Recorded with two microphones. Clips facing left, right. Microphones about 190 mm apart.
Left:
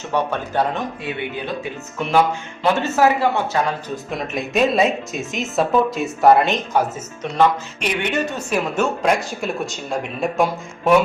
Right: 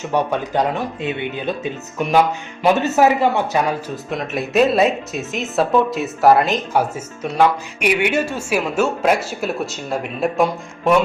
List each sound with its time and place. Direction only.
0.1 s speech: 15° right (ahead or behind)
4.1 s speech: centre (ahead or behind)